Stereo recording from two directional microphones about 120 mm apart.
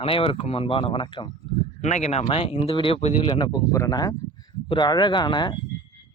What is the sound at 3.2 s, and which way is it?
Speech, 35° left (ahead or behind).